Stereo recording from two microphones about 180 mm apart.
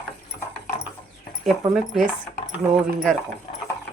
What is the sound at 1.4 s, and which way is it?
Speech, centre (ahead or behind).